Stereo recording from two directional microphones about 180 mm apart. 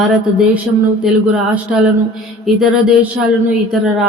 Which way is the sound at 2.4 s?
Centre (ahead or behind).